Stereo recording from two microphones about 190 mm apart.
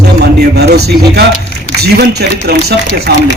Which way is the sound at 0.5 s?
60° right (ahead or behind).